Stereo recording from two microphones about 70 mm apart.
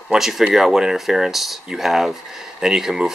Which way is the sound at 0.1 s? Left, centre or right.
Centre.